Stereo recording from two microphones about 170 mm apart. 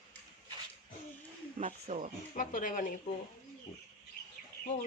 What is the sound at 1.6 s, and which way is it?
Speech, 45° right (ahead or behind).